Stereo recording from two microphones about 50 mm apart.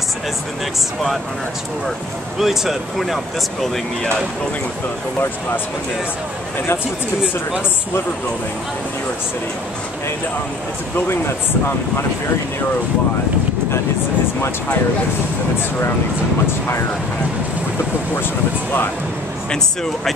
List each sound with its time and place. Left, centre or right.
2.3 s speech: centre
11.0 s speech: left